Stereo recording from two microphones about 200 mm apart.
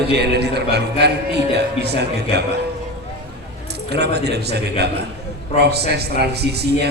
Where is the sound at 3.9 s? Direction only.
55° right (ahead or behind).